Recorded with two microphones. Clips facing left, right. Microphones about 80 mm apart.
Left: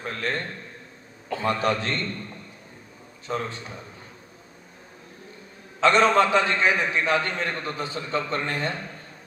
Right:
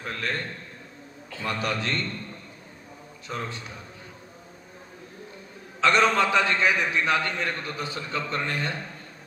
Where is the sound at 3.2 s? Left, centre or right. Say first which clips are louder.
Left 4 dB; left.